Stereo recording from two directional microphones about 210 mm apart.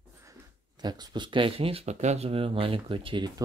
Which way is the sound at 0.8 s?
20° right (ahead or behind).